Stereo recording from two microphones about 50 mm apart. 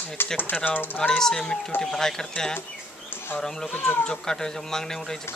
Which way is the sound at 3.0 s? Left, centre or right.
Left.